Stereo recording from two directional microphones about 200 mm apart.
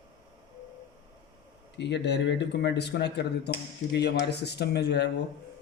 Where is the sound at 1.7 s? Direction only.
60° left (ahead or behind).